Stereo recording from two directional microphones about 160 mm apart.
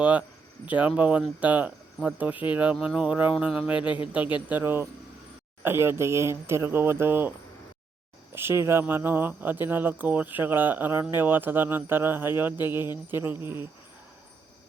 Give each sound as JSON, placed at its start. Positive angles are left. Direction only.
{"t": 0.0, "sound": "speech", "side_deg": -10}
{"t": 3.8, "sound": "speech", "side_deg": 30}
{"t": 4.1, "sound": "speech", "side_deg": -10}